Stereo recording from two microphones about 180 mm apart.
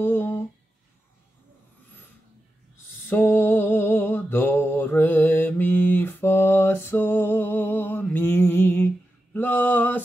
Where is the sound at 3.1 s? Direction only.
10° left (ahead or behind).